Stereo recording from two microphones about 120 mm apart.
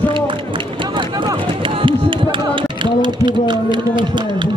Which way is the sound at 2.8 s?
40° right (ahead or behind).